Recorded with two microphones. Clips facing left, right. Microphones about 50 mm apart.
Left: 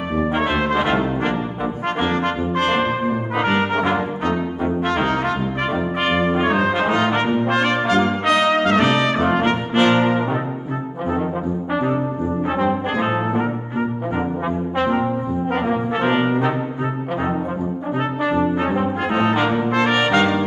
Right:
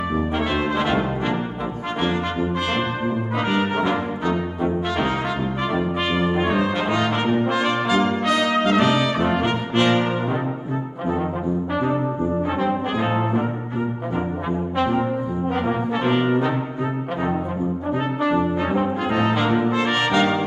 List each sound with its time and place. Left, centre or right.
0.7 s brass instrument: left
2.0 s brass instrument: left
4.8 s brass instrument: left
7.4 s brass instrument: left
8.3 s brass instrument: left
8.6 s brass instrument: left
9.8 s brass instrument: left
12.9 s brass instrument: left
15.9 s brass instrument: left
18.9 s brass instrument: left
20.2 s trumpet: left